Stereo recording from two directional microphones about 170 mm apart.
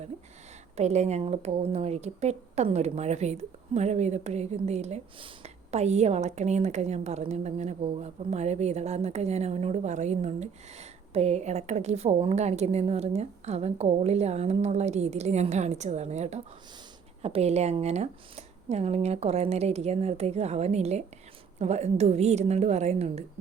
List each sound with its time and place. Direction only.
0.8 s speech: 40° right (ahead or behind)